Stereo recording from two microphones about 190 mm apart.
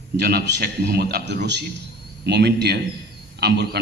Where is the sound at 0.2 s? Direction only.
55° right (ahead or behind).